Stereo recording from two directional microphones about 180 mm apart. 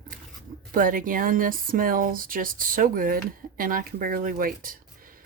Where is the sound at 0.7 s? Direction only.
50° right (ahead or behind).